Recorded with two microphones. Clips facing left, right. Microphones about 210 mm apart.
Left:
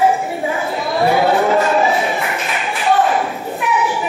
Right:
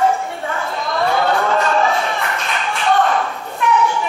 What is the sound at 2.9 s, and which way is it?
Thump, 5° left (ahead or behind).